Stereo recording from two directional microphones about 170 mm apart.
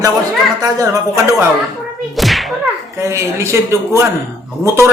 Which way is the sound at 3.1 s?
15° right (ahead or behind).